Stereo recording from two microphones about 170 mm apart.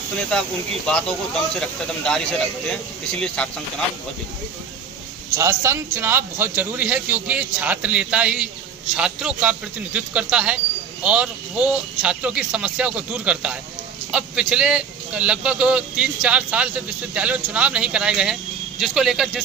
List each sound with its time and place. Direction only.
1.6 s speech: 5° left (ahead or behind)
5.3 s a man's voice: 20° right (ahead or behind); by 19.4 s centre (ahead or behind)